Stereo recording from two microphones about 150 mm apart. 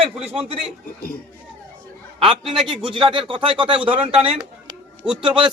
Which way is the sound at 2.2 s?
5° right (ahead or behind).